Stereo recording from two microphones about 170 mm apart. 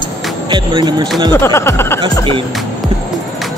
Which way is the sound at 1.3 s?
15° left (ahead or behind).